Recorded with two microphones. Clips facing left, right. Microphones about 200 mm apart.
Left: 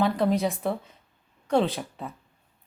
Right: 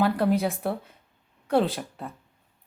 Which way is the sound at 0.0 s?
5° right (ahead or behind).